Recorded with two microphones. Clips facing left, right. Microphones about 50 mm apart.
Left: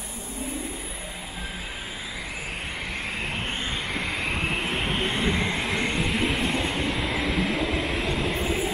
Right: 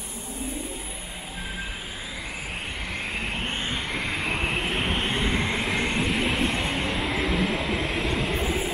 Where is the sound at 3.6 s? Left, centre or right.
Centre.